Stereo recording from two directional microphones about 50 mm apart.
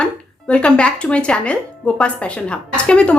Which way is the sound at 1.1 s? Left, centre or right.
Left.